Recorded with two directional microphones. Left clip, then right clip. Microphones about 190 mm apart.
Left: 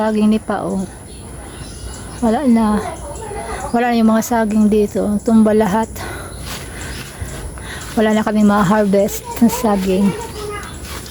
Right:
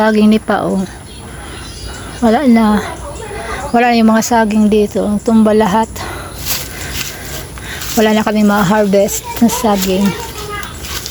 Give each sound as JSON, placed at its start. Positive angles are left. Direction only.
{"t": 0.0, "sound": "speech", "side_deg": -15}
{"t": 2.2, "sound": "speech", "side_deg": -15}
{"t": 7.7, "sound": "speech", "side_deg": 0}